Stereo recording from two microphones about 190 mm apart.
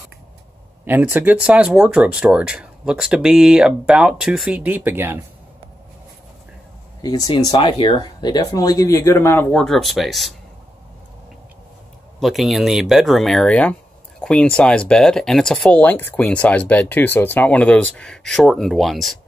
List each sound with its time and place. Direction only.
0.8 s speech: 10° right (ahead or behind)
7.0 s speech: 20° left (ahead or behind); by 10.3 s centre (ahead or behind)
12.2 s speech: centre (ahead or behind)